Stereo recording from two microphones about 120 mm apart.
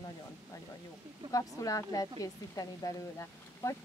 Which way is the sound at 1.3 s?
30° left (ahead or behind).